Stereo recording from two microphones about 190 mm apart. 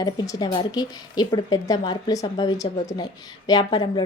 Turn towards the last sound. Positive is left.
turn(degrees=20)  # may be behind; listen again after turning